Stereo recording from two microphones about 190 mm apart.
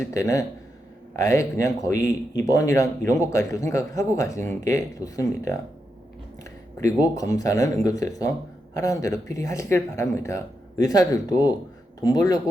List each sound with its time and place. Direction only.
0.0 s a man's voice: 15° left (ahead or behind)